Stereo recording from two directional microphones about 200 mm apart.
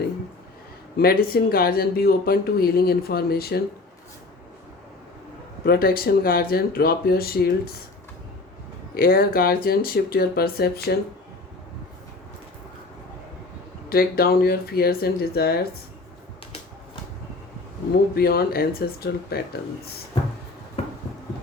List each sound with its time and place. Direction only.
0.9 s speech: 50° left (ahead or behind)
5.6 s speech: 50° left (ahead or behind)
9.0 s speech: 45° left (ahead or behind)
13.9 s speech: 50° left (ahead or behind)
18.1 s speech: 50° left (ahead or behind)